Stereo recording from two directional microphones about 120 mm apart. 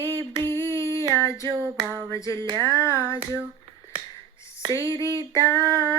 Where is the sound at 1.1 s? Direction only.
25° left (ahead or behind).